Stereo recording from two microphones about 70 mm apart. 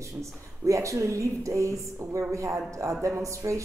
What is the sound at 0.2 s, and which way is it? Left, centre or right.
Speech, right.